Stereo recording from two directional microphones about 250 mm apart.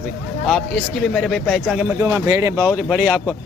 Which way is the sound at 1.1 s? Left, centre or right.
Centre.